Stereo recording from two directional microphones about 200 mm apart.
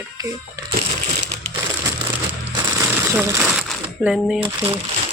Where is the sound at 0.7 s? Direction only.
55° right (ahead or behind).